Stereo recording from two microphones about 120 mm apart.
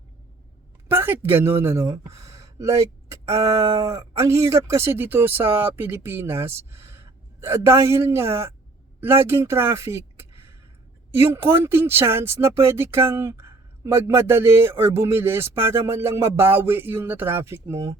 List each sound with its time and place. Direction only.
0.9 s speech: 15° right (ahead or behind)